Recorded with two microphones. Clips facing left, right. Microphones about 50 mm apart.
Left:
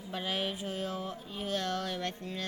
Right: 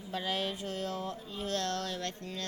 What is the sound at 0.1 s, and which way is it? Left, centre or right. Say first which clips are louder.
Music: even; centre.